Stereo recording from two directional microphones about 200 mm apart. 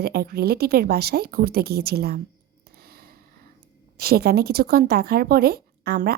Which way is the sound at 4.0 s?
50° right (ahead or behind).